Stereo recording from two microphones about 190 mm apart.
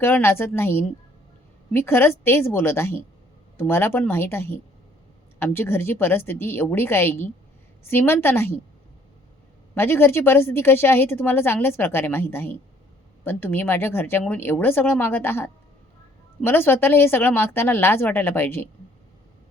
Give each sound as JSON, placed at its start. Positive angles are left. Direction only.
{"t": 0.0, "sound": "a woman's voice", "side_deg": 10}
{"t": 9.7, "sound": "a woman's voice", "side_deg": 10}